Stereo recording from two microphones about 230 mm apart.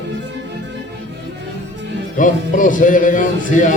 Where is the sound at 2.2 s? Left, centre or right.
Left.